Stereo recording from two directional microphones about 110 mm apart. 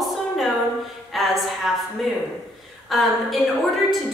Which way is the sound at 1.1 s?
Centre (ahead or behind).